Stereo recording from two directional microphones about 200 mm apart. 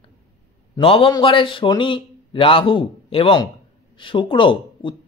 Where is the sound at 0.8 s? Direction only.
25° left (ahead or behind).